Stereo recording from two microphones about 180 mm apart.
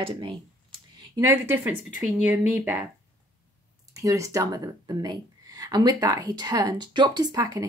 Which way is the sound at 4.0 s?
20° right (ahead or behind).